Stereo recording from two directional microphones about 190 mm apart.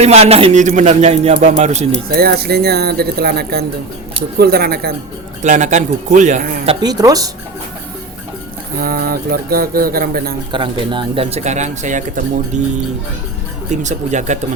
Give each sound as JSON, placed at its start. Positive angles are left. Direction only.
{"t": 0.0, "sound": "speech", "side_deg": -35}
{"t": 2.1, "sound": "speech", "side_deg": -55}
{"t": 5.4, "sound": "speech", "side_deg": -40}
{"t": 6.7, "sound": "speech", "side_deg": -20}
{"t": 8.8, "sound": "speech", "side_deg": -50}
{"t": 10.5, "sound": "speech", "side_deg": -25}
{"t": 13.7, "sound": "speech", "side_deg": -40}